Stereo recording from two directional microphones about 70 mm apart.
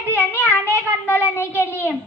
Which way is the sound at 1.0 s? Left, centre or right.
Left.